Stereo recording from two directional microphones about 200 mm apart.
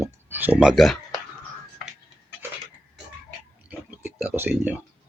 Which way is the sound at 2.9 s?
5° right (ahead or behind).